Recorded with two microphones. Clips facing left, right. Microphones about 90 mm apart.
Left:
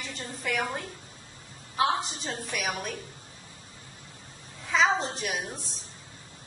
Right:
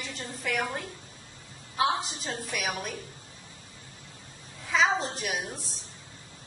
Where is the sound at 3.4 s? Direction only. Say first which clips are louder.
Even; 30° left (ahead or behind).